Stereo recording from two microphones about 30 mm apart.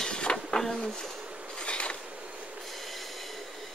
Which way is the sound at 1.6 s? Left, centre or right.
Left.